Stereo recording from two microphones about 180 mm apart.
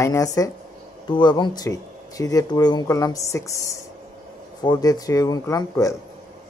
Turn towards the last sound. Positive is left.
turn(degrees=15)  # may be behind; listen again after turning